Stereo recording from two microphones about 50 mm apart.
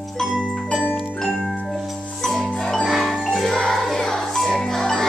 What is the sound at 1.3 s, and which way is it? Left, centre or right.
Music, centre.